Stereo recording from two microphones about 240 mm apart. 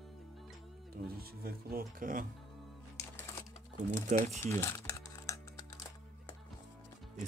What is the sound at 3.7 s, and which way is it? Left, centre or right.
Speech, right.